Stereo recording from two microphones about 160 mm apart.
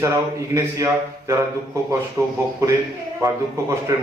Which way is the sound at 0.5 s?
20° right (ahead or behind).